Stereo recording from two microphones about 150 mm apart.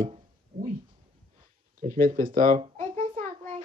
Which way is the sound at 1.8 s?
70° right (ahead or behind).